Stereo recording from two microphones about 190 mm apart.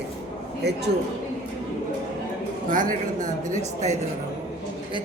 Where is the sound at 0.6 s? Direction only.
60° right (ahead or behind).